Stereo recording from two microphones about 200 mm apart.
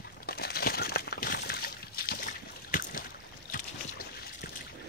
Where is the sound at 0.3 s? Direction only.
50° left (ahead or behind).